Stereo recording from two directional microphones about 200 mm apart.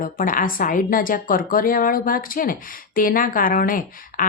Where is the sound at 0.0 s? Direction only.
45° left (ahead or behind).